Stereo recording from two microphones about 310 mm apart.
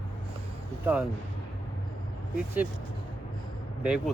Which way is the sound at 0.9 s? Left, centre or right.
Centre.